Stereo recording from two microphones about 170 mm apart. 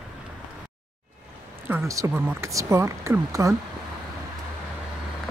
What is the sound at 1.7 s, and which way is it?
Speech, 20° right (ahead or behind).